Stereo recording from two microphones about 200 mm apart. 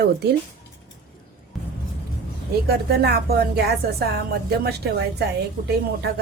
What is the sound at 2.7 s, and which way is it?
A woman's voice, 50° right (ahead or behind).